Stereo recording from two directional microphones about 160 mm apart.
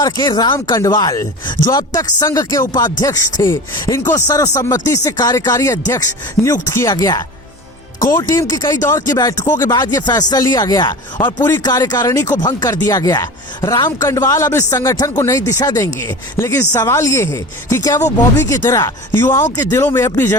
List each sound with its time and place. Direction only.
0.0 s speech: 25° left (ahead or behind)